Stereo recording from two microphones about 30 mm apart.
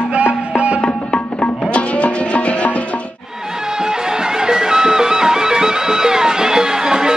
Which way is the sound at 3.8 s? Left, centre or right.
Right.